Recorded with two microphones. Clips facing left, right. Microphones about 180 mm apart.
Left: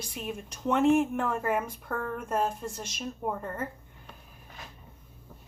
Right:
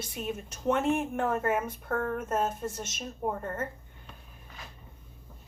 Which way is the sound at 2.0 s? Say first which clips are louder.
Right 3 dB; 45° right (ahead or behind).